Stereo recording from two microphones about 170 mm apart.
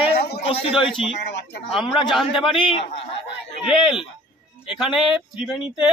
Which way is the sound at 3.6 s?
Centre (ahead or behind).